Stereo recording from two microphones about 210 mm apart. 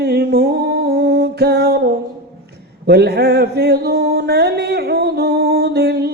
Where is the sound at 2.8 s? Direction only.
50° right (ahead or behind).